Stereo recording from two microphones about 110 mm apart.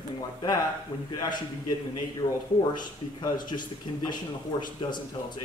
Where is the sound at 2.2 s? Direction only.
50° left (ahead or behind).